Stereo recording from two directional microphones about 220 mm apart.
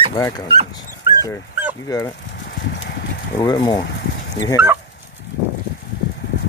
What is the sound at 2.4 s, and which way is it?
Clip-clop, 50° left (ahead or behind).